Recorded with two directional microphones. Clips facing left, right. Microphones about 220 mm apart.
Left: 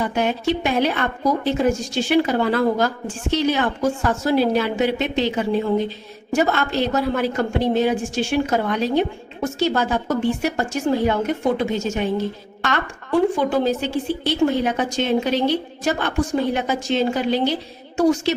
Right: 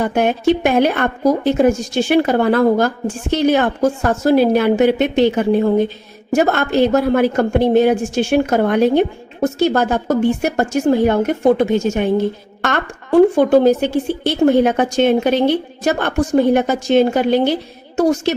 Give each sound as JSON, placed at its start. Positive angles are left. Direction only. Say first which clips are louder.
{"t": 0.0, "sound": "speech", "louder": "right 6 dB", "side_deg": -55}